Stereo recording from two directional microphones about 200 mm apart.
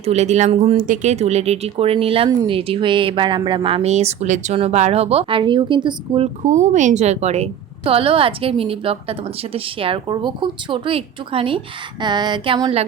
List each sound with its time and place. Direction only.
0.0 s speech: 35° right (ahead or behind)